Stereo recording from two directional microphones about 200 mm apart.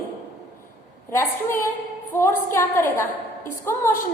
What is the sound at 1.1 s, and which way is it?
A woman's voice, 10° left (ahead or behind).